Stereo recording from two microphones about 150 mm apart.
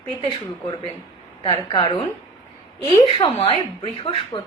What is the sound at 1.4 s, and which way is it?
Speech, 35° left (ahead or behind).